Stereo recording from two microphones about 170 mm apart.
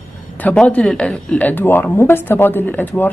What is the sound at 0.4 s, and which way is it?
Speech, 10° left (ahead or behind).